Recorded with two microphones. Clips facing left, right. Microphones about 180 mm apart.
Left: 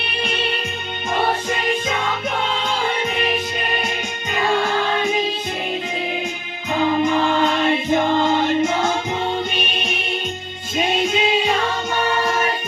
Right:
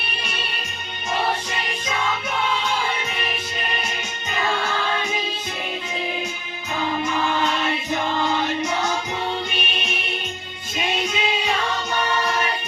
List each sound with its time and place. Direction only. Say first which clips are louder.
0.2 s music: left 12 dB; 55° left (ahead or behind)
7.0 s music: left 5 dB; 45° left (ahead or behind)
12.2 s choir: left 3 dB; 45° left (ahead or behind)